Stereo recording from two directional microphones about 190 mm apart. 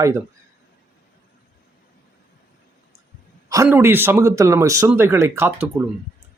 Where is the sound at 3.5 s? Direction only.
15° right (ahead or behind).